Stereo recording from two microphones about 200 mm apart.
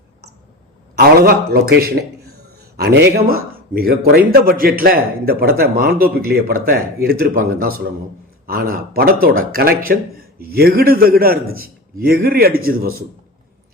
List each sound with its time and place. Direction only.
0.9 s a man's voice: 50° right (ahead or behind)